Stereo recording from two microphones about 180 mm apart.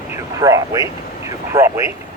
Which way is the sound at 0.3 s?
20° right (ahead or behind).